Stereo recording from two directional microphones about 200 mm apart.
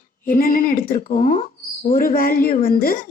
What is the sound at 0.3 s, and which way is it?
A woman's voice, 45° left (ahead or behind).